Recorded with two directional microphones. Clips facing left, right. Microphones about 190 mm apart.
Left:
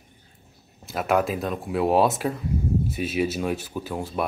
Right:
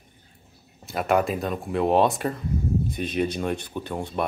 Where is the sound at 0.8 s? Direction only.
Centre (ahead or behind).